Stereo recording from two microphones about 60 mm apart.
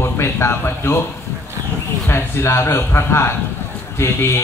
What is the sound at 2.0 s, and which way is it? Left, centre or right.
A man's voice, left.